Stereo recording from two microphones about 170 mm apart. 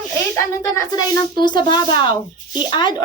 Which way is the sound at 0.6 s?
20° left (ahead or behind).